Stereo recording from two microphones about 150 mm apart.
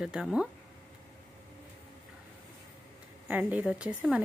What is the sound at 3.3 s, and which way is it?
Speech, 10° right (ahead or behind).